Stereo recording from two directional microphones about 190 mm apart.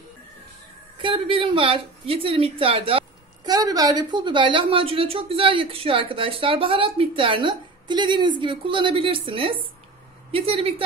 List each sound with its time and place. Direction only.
0.9 s a woman's voice: 25° right (ahead or behind)